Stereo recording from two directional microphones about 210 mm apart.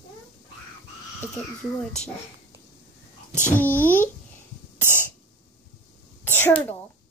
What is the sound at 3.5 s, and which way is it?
Speech, 10° left (ahead or behind).